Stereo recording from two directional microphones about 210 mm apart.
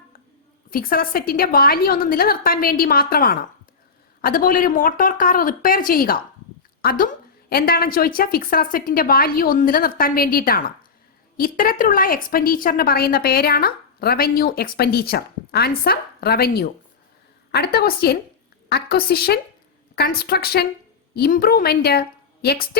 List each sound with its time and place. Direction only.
0.7 s a woman's voice: 45° left (ahead or behind)